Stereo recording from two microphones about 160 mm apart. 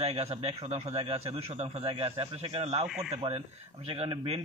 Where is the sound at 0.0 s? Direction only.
40° right (ahead or behind).